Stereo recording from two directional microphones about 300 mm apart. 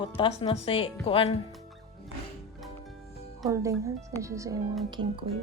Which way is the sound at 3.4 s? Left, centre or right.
Centre.